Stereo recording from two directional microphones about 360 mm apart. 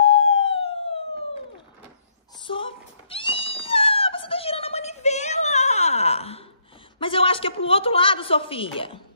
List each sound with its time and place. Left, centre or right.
0.0 s siren: centre
2.4 s cat: centre
7.0 s a woman's voice: centre